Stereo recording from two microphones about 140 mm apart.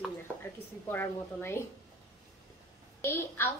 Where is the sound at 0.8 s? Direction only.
15° left (ahead or behind).